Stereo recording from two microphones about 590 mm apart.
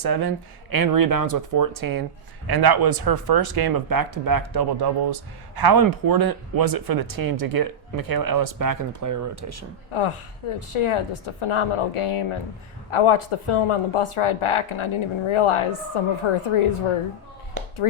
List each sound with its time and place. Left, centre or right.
0.0 s speech: right
9.9 s a woman's voice: left